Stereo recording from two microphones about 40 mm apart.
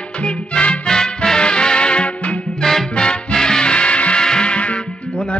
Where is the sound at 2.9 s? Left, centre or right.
Left.